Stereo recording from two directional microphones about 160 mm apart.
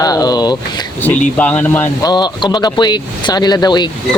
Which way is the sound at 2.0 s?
25° left (ahead or behind).